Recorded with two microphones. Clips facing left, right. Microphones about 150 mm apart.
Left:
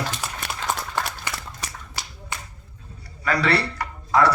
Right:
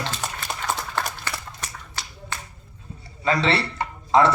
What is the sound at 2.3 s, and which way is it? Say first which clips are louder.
Finger snapping: even; 15° left (ahead or behind).